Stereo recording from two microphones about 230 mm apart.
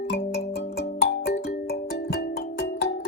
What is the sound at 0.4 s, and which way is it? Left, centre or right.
Music, left.